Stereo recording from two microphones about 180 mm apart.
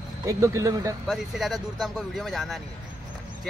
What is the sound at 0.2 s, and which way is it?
Speech, 15° right (ahead or behind).